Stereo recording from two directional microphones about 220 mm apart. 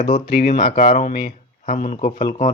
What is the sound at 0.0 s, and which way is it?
Speech, 25° left (ahead or behind).